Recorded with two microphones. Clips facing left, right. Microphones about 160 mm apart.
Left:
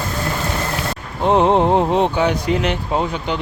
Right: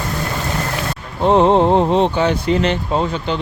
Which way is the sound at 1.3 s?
15° left (ahead or behind).